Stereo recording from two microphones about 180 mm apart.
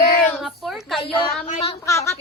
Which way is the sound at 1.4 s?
35° left (ahead or behind).